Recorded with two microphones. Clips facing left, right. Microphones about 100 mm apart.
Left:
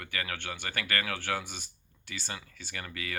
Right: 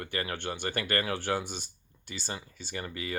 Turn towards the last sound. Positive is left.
turn(degrees=-25)  # may be behind; listen again after turning